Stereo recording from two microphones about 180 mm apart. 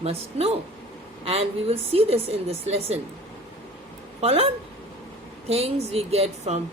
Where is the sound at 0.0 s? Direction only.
35° right (ahead or behind).